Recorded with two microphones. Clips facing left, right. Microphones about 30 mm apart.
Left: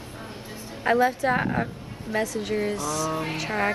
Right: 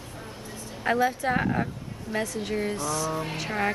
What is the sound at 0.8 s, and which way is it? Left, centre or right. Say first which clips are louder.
A woman's voice: left 3 dB; centre.